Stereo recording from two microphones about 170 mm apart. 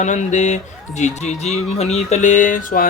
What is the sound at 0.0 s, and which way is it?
Speech, 45° left (ahead or behind).